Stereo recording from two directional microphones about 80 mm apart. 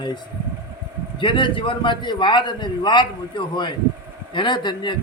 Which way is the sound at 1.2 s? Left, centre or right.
Left.